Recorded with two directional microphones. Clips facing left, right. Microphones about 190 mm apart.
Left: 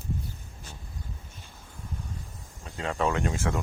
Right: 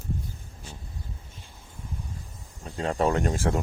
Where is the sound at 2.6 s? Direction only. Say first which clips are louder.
Right 3 dB; 35° right (ahead or behind).